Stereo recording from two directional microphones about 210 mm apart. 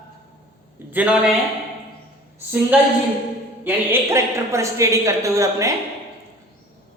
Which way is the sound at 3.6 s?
10° right (ahead or behind).